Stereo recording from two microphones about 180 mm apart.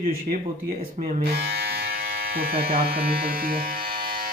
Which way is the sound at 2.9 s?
55° right (ahead or behind).